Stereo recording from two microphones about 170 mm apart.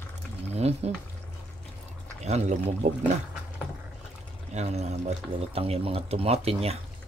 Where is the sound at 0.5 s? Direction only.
40° right (ahead or behind).